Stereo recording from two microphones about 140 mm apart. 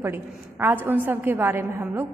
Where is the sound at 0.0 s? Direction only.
15° right (ahead or behind).